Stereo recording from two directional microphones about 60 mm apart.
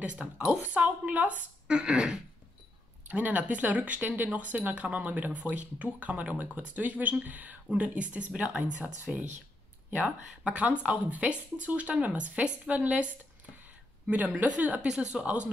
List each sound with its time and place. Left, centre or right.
0.0 s speech: right
3.1 s speech: right
10.4 s speech: right
15.2 s speech: right